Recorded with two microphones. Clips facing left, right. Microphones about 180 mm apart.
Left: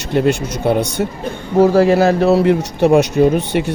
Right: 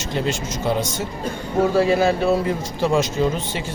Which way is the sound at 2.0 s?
70° left (ahead or behind).